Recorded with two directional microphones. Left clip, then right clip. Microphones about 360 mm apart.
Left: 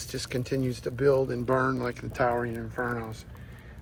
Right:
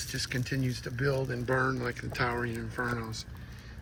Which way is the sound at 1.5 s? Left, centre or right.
Left.